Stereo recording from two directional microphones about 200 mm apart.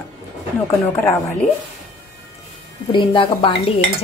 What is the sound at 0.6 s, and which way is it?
Speech, 15° left (ahead or behind).